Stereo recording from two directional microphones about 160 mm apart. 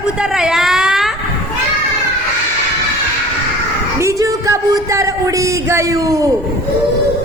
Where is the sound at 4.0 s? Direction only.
20° right (ahead or behind).